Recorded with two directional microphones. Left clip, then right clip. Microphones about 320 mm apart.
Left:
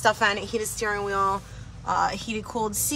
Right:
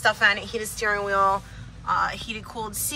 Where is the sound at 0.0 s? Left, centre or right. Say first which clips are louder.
Right 2 dB; centre.